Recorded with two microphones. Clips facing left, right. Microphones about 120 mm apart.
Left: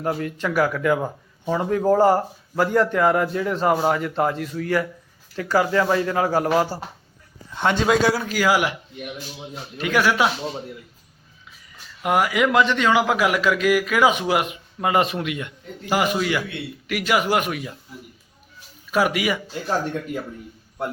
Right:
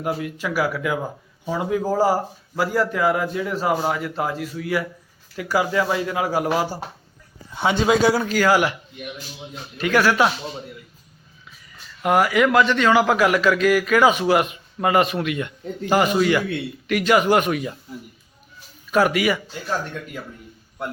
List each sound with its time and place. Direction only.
0.0 s speech: 10° right (ahead or behind); by 8.7 s 10° left (ahead or behind)
9.7 s a man's voice: 15° left (ahead or behind)
12.0 s a man's voice: 15° left (ahead or behind)
18.9 s a man's voice: 10° left (ahead or behind)
19.6 s speech: 25° left (ahead or behind)